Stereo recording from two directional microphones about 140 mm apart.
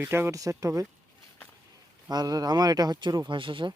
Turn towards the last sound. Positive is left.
turn(degrees=-35)  # may be behind; listen again after turning